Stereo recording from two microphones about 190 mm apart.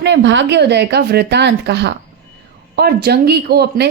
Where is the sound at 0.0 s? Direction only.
65° right (ahead or behind).